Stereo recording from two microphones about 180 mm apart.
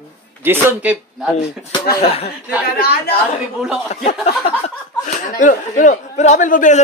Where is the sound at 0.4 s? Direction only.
10° right (ahead or behind).